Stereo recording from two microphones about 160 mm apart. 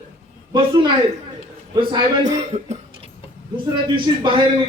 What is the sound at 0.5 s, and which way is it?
A man's voice, 30° right (ahead or behind).